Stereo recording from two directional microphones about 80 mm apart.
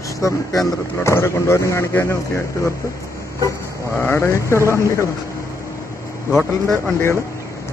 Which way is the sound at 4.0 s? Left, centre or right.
Left.